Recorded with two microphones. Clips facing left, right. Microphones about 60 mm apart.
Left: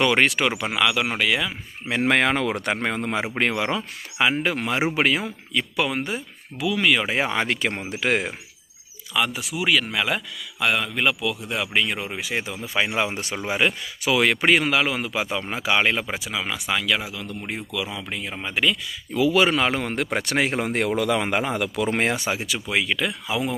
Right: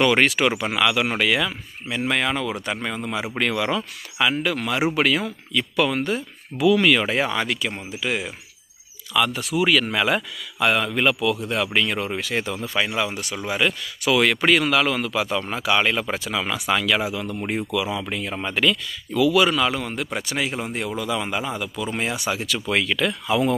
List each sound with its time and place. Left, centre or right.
0.0 s speech: centre
1.9 s speech: left
3.3 s speech: left
6.6 s speech: centre
7.1 s speech: left
7.4 s speech: left
9.1 s speech: centre; by 13.4 s left
13.4 s speech: centre
16.3 s speech: centre
19.1 s speech: left
22.3 s speech: left
22.7 s speech: centre